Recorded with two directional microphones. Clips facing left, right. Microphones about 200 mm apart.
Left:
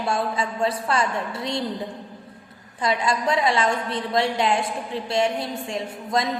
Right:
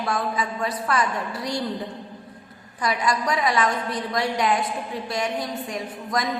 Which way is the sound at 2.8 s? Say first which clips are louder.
Left 1 dB; 25° left (ahead or behind).